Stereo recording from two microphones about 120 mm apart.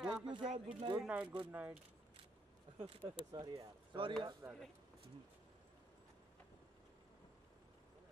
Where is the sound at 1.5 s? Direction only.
15° right (ahead or behind).